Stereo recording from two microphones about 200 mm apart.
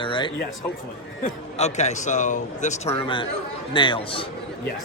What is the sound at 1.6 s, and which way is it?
A man's voice, 35° left (ahead or behind).